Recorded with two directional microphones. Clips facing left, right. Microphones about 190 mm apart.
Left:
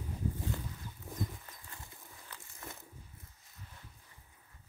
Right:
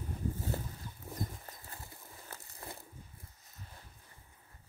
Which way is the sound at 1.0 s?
40° right (ahead or behind).